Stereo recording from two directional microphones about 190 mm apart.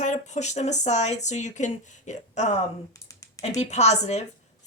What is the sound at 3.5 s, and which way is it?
Speech, 35° left (ahead or behind).